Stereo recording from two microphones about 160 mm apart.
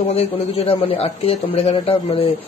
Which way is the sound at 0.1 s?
40° left (ahead or behind).